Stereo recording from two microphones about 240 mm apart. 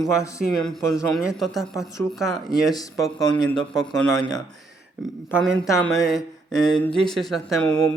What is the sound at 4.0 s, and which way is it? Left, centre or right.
Speech, centre.